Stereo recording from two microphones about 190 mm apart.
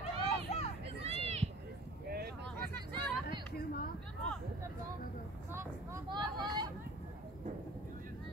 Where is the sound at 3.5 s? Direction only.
55° left (ahead or behind).